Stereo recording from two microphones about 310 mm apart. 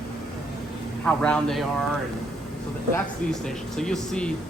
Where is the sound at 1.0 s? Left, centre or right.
Centre.